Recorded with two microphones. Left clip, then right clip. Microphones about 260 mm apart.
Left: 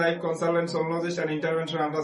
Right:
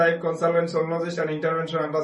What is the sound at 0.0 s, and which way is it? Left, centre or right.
Speech, centre.